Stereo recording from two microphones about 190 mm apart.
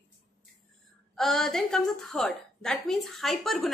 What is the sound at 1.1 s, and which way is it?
A woman's voice, centre (ahead or behind).